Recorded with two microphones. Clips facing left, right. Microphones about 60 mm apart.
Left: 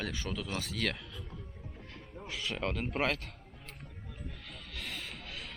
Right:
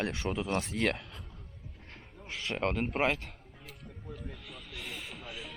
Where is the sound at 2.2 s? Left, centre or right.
Right.